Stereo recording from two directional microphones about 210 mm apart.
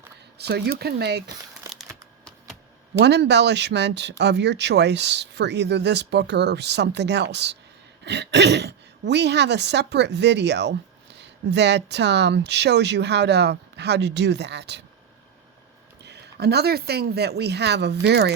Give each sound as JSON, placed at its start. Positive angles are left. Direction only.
{"t": 0.3, "sound": "speech", "side_deg": -50}
{"t": 1.7, "sound": "a sound", "side_deg": 0}
{"t": 3.0, "sound": "speech", "side_deg": -55}
{"t": 16.0, "sound": "speech", "side_deg": -50}